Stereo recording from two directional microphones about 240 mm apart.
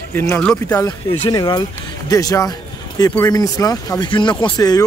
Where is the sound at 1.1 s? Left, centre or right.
Centre.